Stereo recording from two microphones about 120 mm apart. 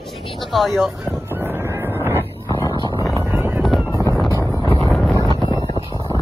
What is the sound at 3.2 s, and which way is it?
Wind noise, 20° right (ahead or behind).